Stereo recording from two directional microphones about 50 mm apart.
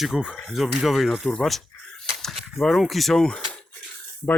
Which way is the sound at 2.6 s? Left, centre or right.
Centre.